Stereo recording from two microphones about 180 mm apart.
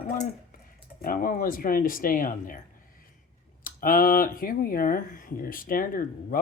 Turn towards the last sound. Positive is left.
turn(degrees=50)  # may be behind; listen again after turning